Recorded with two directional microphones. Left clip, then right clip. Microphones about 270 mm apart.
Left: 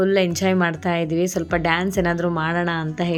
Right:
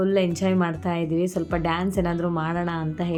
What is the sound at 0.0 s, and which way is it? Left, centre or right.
A woman's voice, centre.